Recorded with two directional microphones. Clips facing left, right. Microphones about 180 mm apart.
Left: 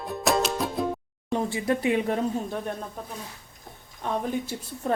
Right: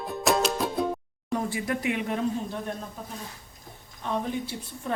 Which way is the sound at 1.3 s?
25° left (ahead or behind).